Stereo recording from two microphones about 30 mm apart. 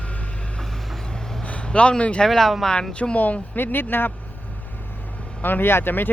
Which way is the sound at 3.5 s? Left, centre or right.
Left.